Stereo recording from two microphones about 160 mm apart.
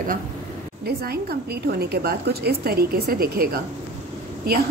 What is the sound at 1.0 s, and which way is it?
Speech, 80° right.